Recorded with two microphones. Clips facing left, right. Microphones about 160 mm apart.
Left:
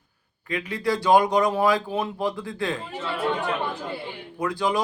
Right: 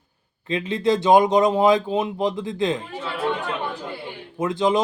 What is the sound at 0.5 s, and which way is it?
Speech, 25° right (ahead or behind).